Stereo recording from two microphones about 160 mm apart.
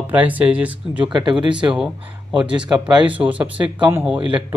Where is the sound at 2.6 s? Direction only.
30° right (ahead or behind).